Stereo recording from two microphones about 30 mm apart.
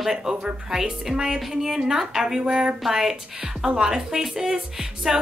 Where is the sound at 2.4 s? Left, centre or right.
Right.